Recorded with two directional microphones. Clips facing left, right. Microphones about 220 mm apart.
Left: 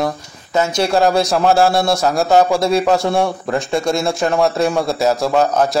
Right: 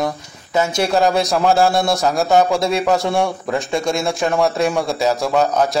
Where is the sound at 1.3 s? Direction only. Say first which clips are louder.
Left 1 dB; centre (ahead or behind).